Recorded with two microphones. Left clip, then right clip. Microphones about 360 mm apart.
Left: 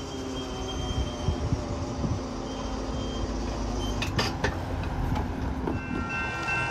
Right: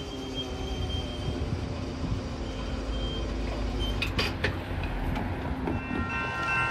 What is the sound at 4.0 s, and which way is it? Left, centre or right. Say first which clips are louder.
Vehicle: left 1 dB; left.